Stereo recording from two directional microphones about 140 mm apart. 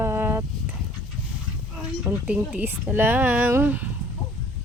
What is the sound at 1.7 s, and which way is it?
Speech, 10° right (ahead or behind).